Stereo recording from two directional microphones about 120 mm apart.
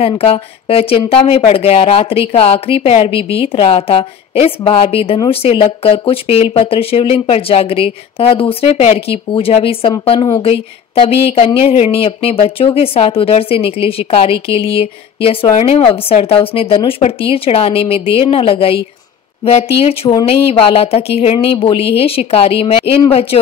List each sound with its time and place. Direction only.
0.0 s a woman's voice: 55° left (ahead or behind)